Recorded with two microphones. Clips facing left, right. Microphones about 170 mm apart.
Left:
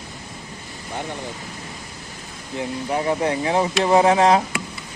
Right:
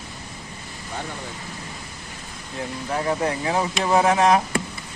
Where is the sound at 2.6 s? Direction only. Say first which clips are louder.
Left 3 dB; 20° left (ahead or behind).